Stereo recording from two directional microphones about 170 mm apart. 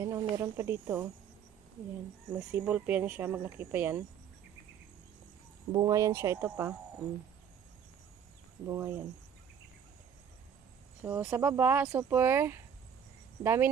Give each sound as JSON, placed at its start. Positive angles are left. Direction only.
{"t": 0.0, "sound": "speech", "side_deg": -20}
{"t": 2.3, "sound": "speech", "side_deg": -20}
{"t": 5.7, "sound": "speech", "side_deg": -20}
{"t": 8.6, "sound": "speech", "side_deg": -20}
{"t": 11.0, "sound": "speech", "side_deg": -15}